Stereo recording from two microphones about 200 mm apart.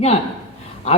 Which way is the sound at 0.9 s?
30° left (ahead or behind).